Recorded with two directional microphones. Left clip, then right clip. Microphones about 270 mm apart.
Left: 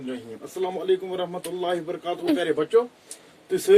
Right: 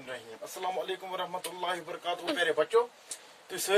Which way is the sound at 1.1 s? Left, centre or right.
Right.